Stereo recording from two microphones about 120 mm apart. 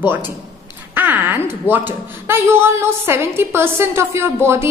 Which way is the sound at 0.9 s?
15° right (ahead or behind).